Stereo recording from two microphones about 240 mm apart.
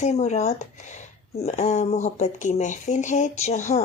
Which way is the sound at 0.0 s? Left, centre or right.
Left.